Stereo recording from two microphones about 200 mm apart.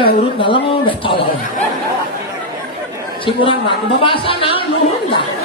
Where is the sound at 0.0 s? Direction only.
25° left (ahead or behind).